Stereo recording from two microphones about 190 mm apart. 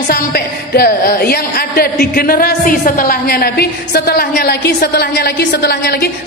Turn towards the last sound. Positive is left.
turn(degrees=60)  # may be behind; listen again after turning